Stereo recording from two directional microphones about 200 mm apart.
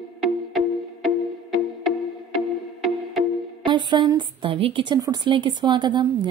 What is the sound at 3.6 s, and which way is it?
A woman's voice, 25° right (ahead or behind).